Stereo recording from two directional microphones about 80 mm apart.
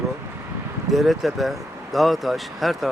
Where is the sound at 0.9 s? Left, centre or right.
Centre.